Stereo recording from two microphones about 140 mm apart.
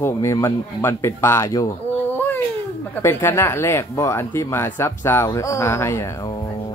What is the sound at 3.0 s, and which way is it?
A woman's voice, 15° left (ahead or behind).